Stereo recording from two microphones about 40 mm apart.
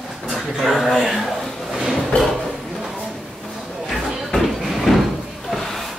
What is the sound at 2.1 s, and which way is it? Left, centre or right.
Speech, left.